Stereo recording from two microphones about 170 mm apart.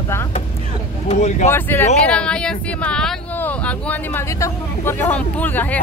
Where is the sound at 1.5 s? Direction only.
15° left (ahead or behind).